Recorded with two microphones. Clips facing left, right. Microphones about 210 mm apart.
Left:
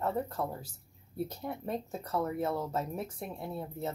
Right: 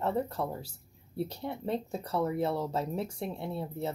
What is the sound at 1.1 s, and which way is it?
Speech, 30° right (ahead or behind).